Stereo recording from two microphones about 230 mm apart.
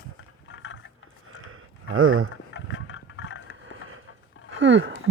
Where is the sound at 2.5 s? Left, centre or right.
Left.